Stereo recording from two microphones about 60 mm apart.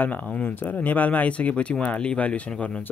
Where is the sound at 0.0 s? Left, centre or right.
Left.